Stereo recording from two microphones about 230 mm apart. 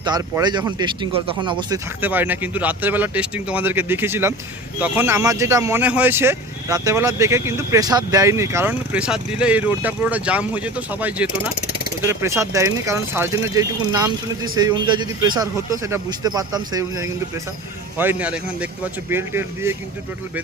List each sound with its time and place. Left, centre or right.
0.0 s speech: centre
2.0 s speech: centre